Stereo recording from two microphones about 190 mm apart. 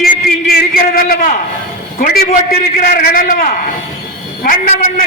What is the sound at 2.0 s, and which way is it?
A man's voice, 50° left (ahead or behind).